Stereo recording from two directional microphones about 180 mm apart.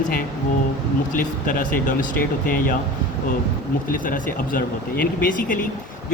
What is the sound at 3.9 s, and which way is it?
Speech, 50° left (ahead or behind).